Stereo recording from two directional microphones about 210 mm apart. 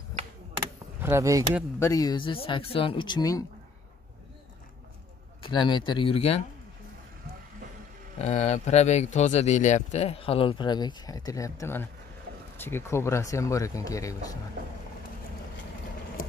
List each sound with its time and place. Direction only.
0.6 s a sound: 15° right (ahead or behind)
1.8 s speech: 15° left (ahead or behind)
5.4 s speech: 20° left (ahead or behind)
8.2 s speech: 35° left (ahead or behind); by 14.1 s 15° left (ahead or behind)
16.2 s vehicle: 45° left (ahead or behind)